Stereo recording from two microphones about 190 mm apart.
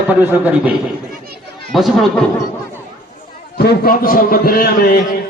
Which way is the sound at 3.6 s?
55° left (ahead or behind).